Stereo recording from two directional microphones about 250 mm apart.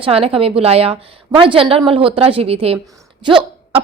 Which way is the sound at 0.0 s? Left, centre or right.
Right.